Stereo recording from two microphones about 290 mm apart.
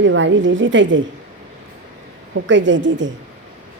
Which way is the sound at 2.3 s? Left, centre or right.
Right.